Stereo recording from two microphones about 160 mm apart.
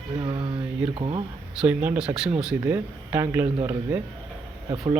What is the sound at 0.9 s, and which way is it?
Speech, 30° right (ahead or behind).